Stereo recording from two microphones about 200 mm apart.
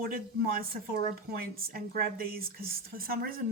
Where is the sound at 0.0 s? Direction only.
50° right (ahead or behind).